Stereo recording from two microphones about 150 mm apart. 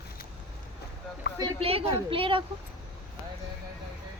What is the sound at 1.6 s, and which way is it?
Speech, 40° right (ahead or behind).